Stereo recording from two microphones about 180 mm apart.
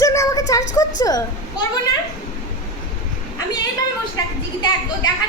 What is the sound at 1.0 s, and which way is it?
Speech, 20° left (ahead or behind).